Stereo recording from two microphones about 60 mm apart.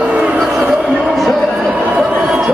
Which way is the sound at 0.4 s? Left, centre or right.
Centre.